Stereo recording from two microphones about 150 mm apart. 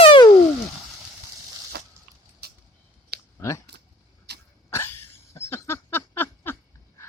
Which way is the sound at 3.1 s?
90° right.